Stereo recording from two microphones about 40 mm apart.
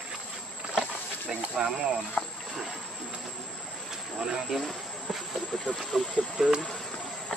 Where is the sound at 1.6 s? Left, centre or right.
Right.